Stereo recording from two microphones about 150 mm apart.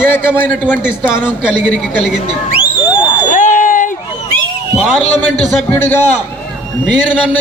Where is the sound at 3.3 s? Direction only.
55° left (ahead or behind).